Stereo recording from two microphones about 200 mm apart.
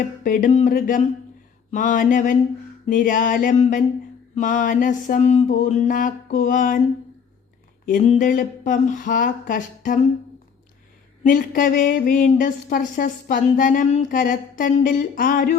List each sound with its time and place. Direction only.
0.3 s a sound: 40° left (ahead or behind)
7.9 s speech: 40° left (ahead or behind)
11.2 s speech: 45° left (ahead or behind)